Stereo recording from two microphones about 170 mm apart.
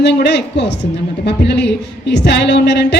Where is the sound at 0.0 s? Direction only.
85° left.